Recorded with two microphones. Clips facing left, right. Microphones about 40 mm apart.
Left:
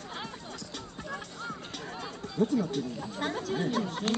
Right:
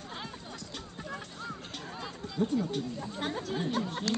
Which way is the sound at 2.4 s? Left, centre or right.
Right.